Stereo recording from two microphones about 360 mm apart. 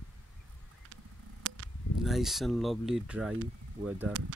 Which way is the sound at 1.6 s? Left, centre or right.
Right.